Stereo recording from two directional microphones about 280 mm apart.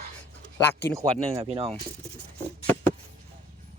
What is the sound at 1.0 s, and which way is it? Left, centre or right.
Speech, right.